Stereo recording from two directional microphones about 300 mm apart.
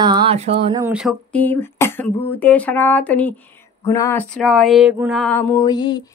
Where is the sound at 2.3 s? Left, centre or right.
Centre.